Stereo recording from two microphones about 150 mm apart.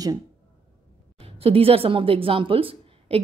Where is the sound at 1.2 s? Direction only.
40° right (ahead or behind).